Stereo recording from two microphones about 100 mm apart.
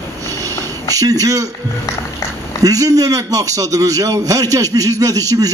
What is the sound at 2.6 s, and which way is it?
A man's voice, 35° right (ahead or behind).